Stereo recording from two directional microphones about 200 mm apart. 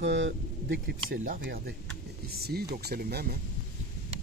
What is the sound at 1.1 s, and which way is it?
Speech, 45° right (ahead or behind).